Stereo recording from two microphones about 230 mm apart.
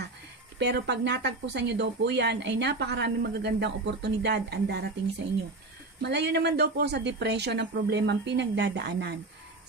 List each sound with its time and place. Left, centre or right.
0.6 s speech: right
5.9 s speech: right